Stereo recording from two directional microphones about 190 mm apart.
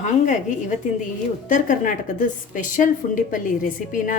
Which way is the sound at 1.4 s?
45° left (ahead or behind).